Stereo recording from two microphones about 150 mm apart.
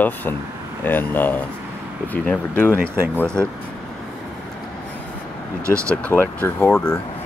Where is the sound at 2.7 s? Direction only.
15° right (ahead or behind).